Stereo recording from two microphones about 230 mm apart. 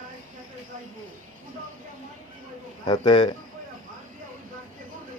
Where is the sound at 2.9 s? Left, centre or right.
Centre.